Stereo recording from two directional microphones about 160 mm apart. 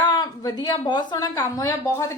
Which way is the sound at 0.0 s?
25° left (ahead or behind).